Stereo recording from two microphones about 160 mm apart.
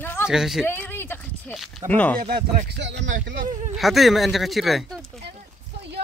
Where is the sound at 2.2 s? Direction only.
75° right (ahead or behind).